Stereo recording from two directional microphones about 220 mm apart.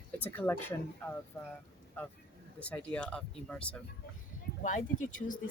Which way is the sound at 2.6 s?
5° left (ahead or behind).